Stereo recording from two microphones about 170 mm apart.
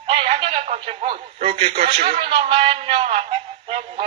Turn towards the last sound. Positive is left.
turn(degrees=-30)  # may be behind; listen again after turning